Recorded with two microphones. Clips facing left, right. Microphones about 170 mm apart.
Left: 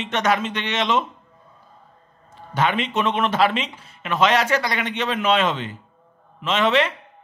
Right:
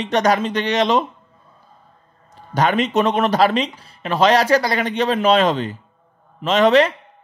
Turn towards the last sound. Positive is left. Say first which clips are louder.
# right 6 dB
turn(degrees=-40)  # may be behind; listen again after turning